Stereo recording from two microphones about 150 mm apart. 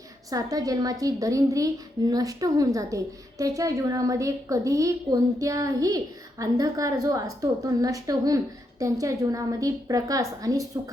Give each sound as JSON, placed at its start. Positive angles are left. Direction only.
{"t": 0.3, "sound": "a woman's voice", "side_deg": -25}